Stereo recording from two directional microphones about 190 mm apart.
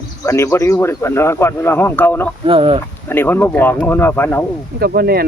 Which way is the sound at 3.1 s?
10° left (ahead or behind).